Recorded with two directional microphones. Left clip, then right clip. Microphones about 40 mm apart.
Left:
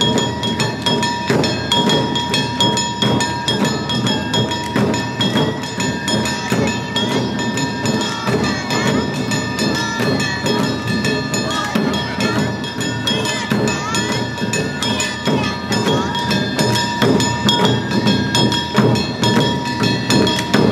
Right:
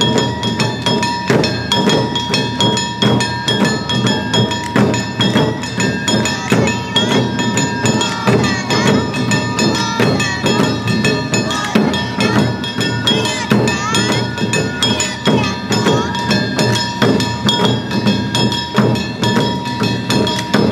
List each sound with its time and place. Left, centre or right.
0.0 s train: right
13.0 s music: right; by 20.6 s centre